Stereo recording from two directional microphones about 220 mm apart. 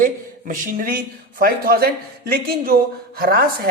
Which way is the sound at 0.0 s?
35° right (ahead or behind).